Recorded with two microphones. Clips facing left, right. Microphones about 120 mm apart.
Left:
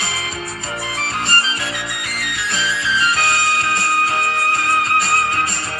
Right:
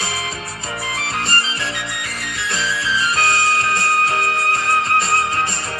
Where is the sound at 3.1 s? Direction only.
35° right (ahead or behind).